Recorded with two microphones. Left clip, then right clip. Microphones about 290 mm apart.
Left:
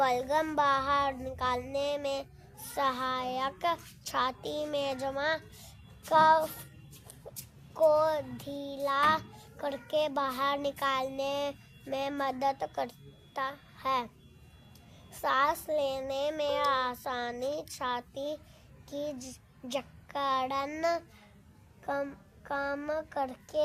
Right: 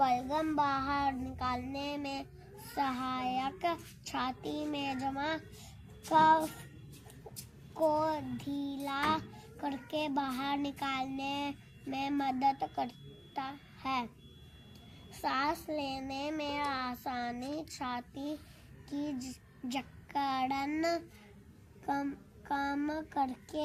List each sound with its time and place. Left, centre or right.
0.0 s child singing: left
7.9 s child singing: left
15.2 s child singing: left
18.9 s a child's voice: left
21.8 s child singing: left